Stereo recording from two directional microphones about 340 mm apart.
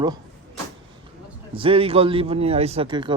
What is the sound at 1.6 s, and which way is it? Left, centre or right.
A man's voice, centre.